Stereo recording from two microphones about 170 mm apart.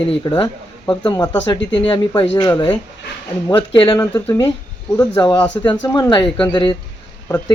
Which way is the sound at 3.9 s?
20° left (ahead or behind).